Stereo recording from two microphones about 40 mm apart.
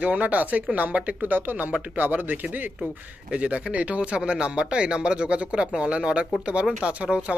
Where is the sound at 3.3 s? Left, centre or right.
Right.